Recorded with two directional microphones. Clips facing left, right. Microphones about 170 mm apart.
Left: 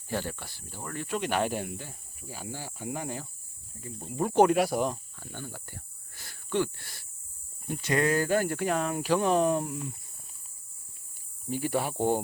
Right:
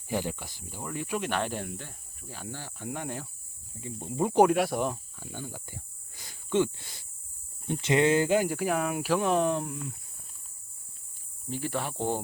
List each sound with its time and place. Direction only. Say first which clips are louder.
0.1 s speech: right 2 dB; 15° right (ahead or behind)
1.3 s speech: left 2 dB; 10° left (ahead or behind)
3.8 s speech: right 2 dB; 20° right (ahead or behind)
4.4 s speech: left 1 dB; centre (ahead or behind); by 8.5 s 15° right (ahead or behind)
8.5 s speech: even; 5° right (ahead or behind)
11.4 s speech: left 3 dB; 10° left (ahead or behind)